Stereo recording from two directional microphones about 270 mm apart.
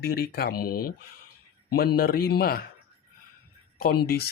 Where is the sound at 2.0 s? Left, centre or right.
Left.